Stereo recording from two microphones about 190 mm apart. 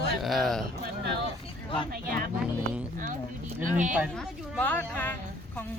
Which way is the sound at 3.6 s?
40° right (ahead or behind).